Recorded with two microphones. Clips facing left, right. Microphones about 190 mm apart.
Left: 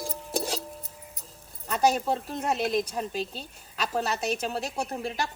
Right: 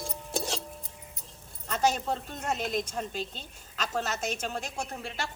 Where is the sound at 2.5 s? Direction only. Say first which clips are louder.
Left 4 dB; 35° left (ahead or behind).